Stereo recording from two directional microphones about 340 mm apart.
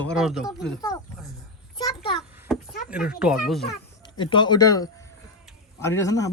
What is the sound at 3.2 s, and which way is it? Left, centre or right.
Speech, centre.